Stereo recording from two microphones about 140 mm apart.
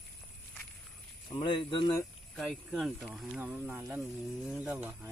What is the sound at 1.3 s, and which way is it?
Speech, 35° left (ahead or behind).